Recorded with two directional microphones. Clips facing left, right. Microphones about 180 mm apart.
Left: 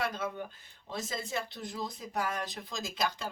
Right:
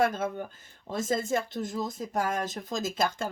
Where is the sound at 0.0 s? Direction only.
50° right (ahead or behind).